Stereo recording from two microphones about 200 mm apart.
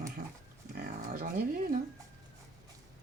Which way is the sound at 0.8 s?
45° right (ahead or behind).